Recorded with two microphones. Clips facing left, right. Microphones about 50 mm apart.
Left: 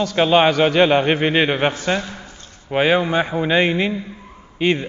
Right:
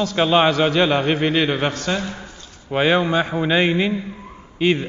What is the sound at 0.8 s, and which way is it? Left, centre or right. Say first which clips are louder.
A man's voice: left 2 dB; left.